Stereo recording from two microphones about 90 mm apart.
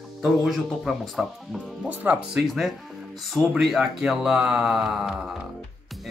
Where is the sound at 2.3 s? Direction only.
5° right (ahead or behind).